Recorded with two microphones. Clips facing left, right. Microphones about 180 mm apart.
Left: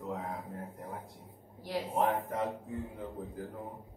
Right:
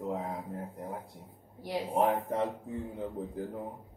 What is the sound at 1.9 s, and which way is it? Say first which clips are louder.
Speech: right 3 dB; 35° right (ahead or behind).